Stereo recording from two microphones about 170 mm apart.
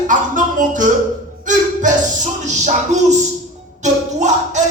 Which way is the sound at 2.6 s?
45° right (ahead or behind).